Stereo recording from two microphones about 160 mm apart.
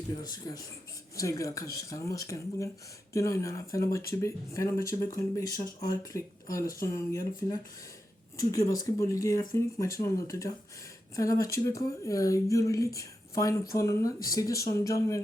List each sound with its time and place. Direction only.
0.2 s speech: 25° left (ahead or behind)